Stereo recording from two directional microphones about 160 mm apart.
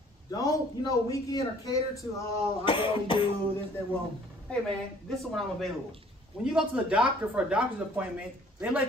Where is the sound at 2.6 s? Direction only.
30° left (ahead or behind).